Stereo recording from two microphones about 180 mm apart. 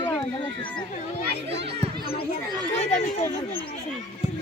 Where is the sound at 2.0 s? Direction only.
30° left (ahead or behind).